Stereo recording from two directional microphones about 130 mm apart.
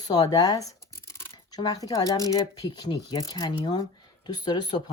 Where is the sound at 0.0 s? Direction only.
30° left (ahead or behind).